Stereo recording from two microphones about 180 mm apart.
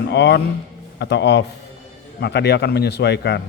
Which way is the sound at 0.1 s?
70° left (ahead or behind).